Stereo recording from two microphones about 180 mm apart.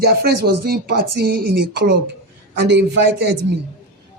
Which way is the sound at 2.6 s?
75° right (ahead or behind).